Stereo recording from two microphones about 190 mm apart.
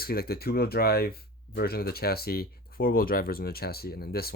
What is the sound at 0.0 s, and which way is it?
Speech, 55° left (ahead or behind).